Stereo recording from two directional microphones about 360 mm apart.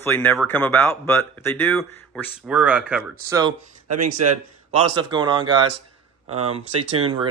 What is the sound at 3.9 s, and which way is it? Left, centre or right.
Speech, right.